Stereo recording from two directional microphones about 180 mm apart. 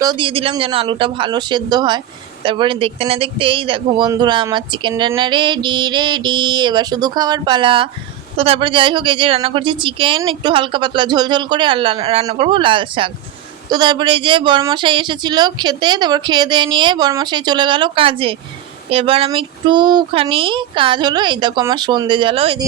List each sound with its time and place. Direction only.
0.0 s a man's voice: 25° right (ahead or behind)